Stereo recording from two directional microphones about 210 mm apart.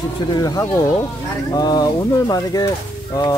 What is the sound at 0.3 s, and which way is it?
Speech, 15° left (ahead or behind).